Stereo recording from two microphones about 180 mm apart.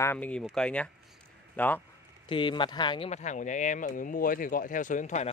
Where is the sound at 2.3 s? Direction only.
30° left (ahead or behind).